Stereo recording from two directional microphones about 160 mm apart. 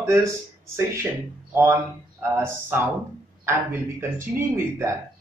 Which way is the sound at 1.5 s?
15° right (ahead or behind).